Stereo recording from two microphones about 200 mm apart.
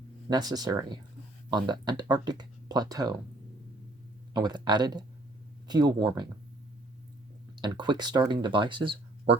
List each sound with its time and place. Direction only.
0.3 s speech: 20° right (ahead or behind)
4.4 s speech: 20° right (ahead or behind)
7.6 s speech: 20° right (ahead or behind)